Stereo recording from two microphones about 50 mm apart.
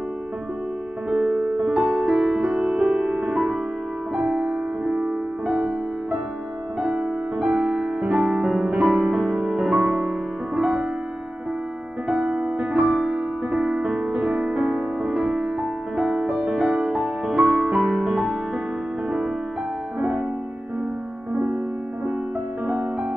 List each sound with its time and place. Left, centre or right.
1.1 s music: centre
2.6 s music: centre
6.8 s music: centre
7.3 s music: centre
12.1 s music: centre